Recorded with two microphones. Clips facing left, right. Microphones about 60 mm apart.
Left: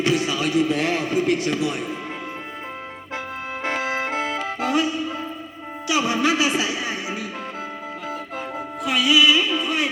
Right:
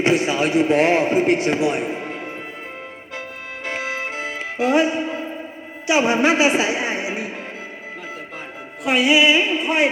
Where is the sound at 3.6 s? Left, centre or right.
Left.